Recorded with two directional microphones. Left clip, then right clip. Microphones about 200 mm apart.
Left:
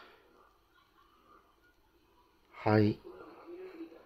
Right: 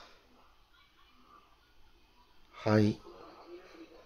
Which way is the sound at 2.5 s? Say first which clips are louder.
Left 1 dB; 15° left (ahead or behind).